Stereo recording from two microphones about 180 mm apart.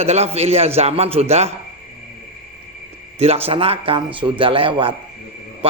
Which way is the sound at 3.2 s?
35° right (ahead or behind).